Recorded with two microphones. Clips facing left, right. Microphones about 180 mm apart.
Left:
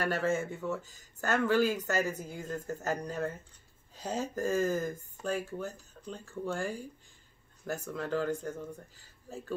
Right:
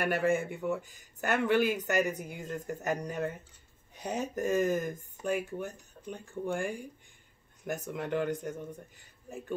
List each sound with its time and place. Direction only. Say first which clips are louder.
0.0 s speech: right 2 dB; 15° right (ahead or behind)
7.9 s speech: even; 20° right (ahead or behind)